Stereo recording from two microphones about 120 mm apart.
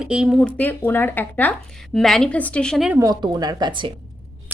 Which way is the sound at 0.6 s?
15° left (ahead or behind).